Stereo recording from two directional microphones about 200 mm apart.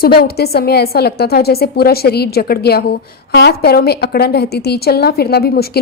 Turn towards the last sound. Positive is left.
turn(degrees=50)  # may be behind; listen again after turning